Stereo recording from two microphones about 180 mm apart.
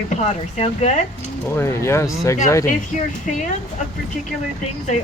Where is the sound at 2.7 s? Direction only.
45° left (ahead or behind).